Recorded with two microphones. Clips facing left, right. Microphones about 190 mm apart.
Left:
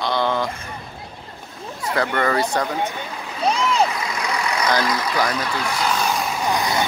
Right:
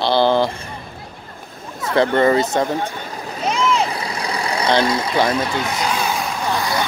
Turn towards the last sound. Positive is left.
turn(degrees=20)  # may be behind; listen again after turning